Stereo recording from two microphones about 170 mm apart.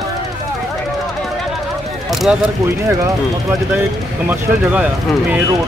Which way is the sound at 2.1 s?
Centre (ahead or behind).